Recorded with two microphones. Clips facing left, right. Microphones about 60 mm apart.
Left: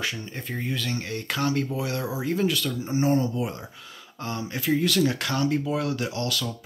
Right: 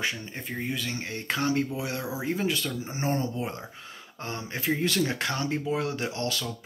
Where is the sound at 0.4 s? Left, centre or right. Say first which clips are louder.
Left 2 dB; centre.